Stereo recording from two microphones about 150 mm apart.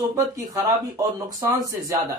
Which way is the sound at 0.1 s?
20° right (ahead or behind).